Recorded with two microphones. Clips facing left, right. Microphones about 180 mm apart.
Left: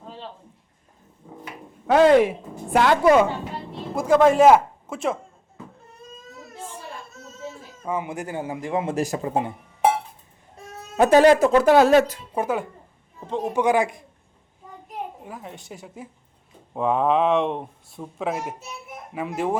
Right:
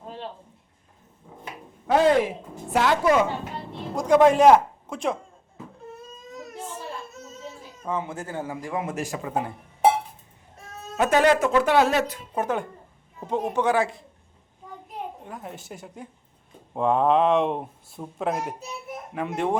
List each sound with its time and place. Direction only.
1.9 s speech: 75° left (ahead or behind)
2.7 s a woman's voice: 55° left (ahead or behind)
3.9 s speech: 5° left (ahead or behind)
7.9 s speech: 15° left (ahead or behind); by 9.4 s 35° left (ahead or behind)
10.9 s speech: 35° left (ahead or behind)
12.3 s speech: 10° left (ahead or behind)
13.1 s a sound: 10° right (ahead or behind)
13.4 s speech: 10° left (ahead or behind)
15.2 s speech: centre (ahead or behind)